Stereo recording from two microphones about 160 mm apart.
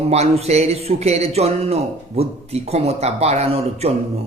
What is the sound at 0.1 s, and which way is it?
A man's voice, 40° right (ahead or behind).